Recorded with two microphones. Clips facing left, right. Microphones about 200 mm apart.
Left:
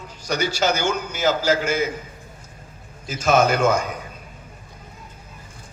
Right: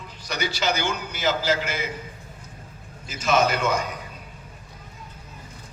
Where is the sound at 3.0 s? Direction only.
50° left (ahead or behind).